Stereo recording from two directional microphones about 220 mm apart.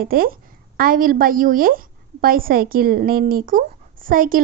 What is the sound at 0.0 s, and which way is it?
A woman's voice, 40° right (ahead or behind).